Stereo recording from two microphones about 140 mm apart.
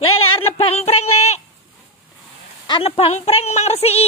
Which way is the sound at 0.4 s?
45° left (ahead or behind).